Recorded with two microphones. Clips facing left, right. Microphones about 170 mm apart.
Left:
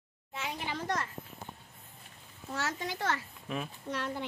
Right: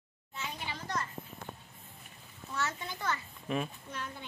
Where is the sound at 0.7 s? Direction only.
70° left (ahead or behind).